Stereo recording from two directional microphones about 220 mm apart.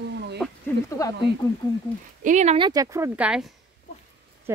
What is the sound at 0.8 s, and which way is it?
Speech, 15° left (ahead or behind).